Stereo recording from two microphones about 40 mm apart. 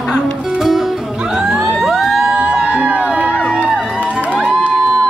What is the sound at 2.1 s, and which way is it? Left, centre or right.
Music, centre.